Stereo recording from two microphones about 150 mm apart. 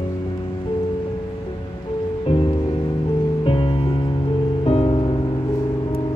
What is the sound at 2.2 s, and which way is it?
Music, 35° left (ahead or behind).